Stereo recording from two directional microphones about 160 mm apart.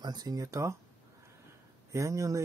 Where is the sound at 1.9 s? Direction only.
20° right (ahead or behind).